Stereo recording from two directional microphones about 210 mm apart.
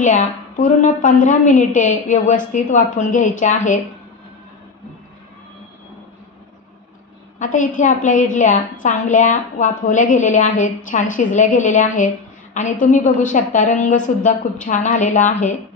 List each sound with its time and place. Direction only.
0.0 s a woman's voice: 35° left (ahead or behind)
7.3 s a woman's voice: 40° left (ahead or behind)